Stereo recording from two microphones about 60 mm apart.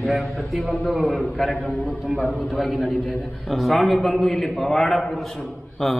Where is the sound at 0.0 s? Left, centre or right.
Centre.